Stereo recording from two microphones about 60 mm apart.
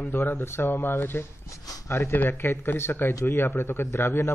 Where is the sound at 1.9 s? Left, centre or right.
Left.